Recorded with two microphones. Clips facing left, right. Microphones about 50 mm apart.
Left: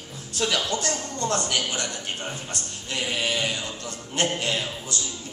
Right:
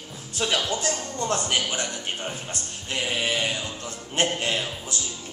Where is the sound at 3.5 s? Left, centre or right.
Right.